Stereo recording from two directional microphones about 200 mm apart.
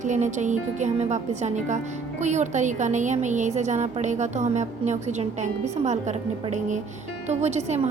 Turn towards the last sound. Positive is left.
turn(degrees=-35)  # may be behind; listen again after turning